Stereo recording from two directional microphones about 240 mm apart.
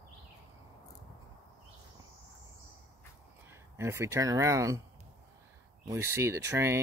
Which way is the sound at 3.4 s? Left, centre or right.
Centre.